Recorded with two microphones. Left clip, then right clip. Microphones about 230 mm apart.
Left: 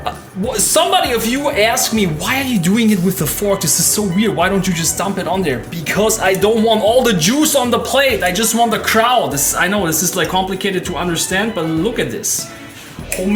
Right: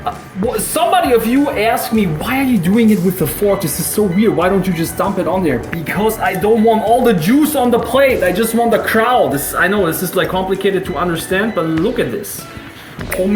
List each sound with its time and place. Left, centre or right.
0.5 s speech: left
4.2 s speech: left